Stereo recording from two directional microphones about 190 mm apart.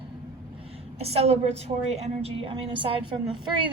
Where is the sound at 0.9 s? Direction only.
35° right (ahead or behind).